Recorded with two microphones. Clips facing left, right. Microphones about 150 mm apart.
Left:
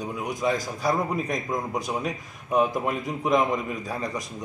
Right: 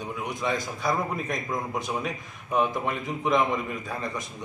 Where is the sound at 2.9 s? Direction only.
40° left (ahead or behind).